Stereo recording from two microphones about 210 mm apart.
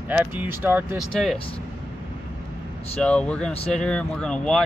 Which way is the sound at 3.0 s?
5° left (ahead or behind).